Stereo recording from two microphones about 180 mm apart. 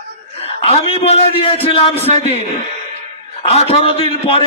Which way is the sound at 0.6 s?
35° left (ahead or behind).